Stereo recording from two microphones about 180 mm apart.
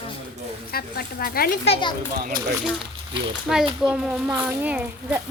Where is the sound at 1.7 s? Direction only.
25° left (ahead or behind).